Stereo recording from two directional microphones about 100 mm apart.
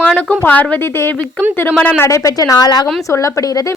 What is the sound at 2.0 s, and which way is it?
A woman's voice, 35° left (ahead or behind).